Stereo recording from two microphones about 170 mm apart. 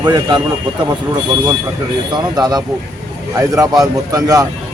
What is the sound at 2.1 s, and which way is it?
A man's voice, 25° right (ahead or behind).